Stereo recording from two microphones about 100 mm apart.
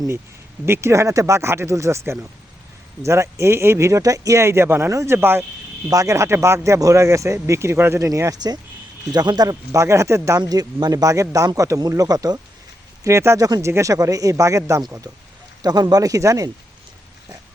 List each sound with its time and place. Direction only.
0.6 s speech: 25° right (ahead or behind)
10.4 s speech: 40° right (ahead or behind)
15.6 s speech: 40° right (ahead or behind)